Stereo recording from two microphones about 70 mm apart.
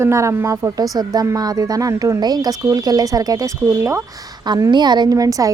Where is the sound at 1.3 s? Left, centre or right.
Right.